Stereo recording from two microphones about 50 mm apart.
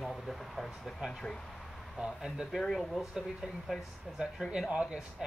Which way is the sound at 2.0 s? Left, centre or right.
Centre.